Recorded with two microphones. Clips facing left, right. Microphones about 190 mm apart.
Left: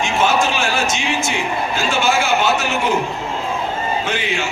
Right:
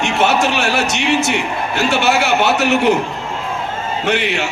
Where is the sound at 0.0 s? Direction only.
65° right (ahead or behind).